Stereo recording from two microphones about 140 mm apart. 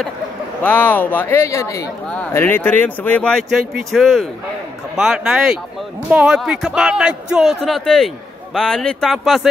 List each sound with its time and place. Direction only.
0.7 s speech: 15° left (ahead or behind)
2.0 s a man's voice: 10° left (ahead or behind)